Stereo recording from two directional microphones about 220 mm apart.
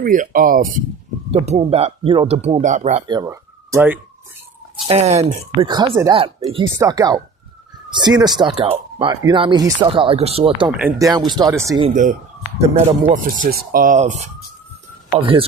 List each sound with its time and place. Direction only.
0.0 s speech: 40° right (ahead or behind)
3.1 s speech: 15° right (ahead or behind)
4.9 s speech: 30° right (ahead or behind)
10.7 s speech: 5° right (ahead or behind)
12.5 s speech: 30° right (ahead or behind)